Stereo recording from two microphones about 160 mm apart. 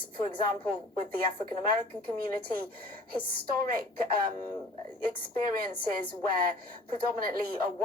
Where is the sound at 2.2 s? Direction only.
70° right (ahead or behind).